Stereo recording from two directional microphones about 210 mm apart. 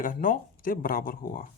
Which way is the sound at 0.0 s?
40° left (ahead or behind).